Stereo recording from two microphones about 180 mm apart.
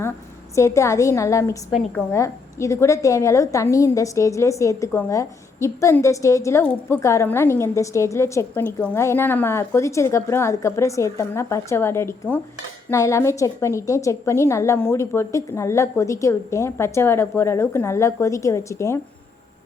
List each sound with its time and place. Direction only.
0.5 s a woman's voice: 15° left (ahead or behind)